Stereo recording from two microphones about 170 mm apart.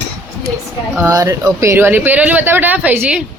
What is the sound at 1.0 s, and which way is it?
Speech, 20° right (ahead or behind).